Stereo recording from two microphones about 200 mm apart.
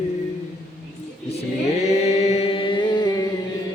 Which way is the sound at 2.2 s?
30° left (ahead or behind).